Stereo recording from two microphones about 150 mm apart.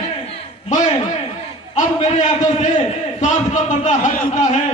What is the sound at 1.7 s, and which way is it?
A man's voice, 55° left (ahead or behind).